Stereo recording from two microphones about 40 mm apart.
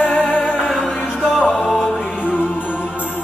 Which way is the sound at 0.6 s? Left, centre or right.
Centre.